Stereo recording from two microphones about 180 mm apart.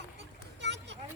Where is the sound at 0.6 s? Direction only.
75° right (ahead or behind).